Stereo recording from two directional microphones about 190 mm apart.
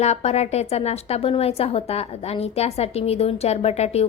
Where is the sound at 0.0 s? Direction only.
35° left (ahead or behind).